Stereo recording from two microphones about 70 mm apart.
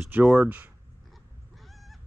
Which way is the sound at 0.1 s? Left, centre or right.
Right.